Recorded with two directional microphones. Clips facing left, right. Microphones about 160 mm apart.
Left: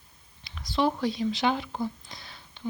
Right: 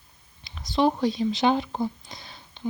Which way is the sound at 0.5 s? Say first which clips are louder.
Right 4 dB; 20° right (ahead or behind).